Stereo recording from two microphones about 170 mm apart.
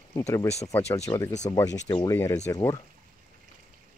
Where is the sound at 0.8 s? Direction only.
40° left (ahead or behind).